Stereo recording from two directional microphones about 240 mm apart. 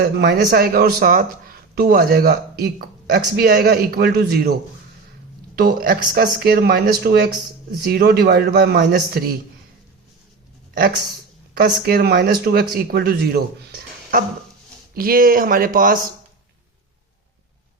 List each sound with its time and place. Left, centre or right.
0.0 s a man's voice: right
5.5 s speech: right
11.5 s speech: right